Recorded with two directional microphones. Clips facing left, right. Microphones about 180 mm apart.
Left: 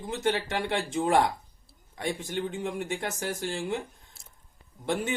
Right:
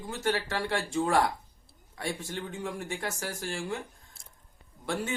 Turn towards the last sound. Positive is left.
turn(degrees=20)  # may be behind; listen again after turning